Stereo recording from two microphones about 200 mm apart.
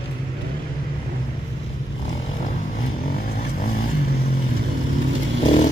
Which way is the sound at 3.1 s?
50° left (ahead or behind).